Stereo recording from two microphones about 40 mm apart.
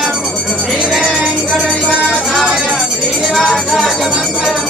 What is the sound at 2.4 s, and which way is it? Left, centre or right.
Music, centre.